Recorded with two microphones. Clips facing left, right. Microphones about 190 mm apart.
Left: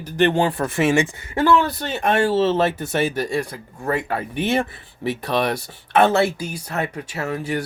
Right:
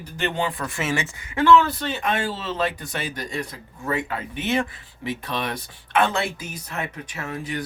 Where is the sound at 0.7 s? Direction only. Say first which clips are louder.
Left 11 dB; 25° left (ahead or behind).